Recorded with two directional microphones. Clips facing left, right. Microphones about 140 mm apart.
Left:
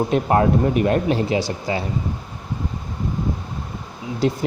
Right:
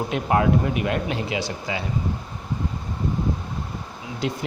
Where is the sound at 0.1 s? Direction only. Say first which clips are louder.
Even; 40° left (ahead or behind).